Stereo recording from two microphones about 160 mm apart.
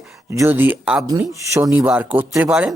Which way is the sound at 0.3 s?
15° right (ahead or behind).